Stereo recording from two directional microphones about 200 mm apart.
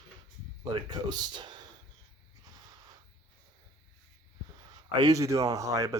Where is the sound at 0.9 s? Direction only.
20° right (ahead or behind).